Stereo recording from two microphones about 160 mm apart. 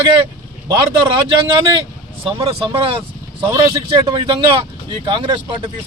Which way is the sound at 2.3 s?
35° right (ahead or behind).